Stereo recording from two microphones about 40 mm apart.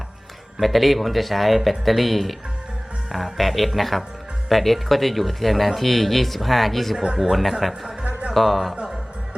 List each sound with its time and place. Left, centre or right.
0.6 s speech: centre
6.9 s speech: centre
7.2 s a man's voice: centre